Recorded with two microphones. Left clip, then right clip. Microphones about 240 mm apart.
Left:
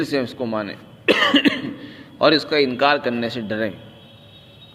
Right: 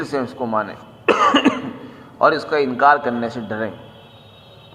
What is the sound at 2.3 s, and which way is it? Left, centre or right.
A man's voice, left.